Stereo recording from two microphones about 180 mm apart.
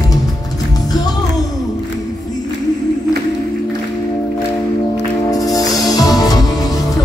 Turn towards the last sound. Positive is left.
turn(degrees=20)  # may be behind; listen again after turning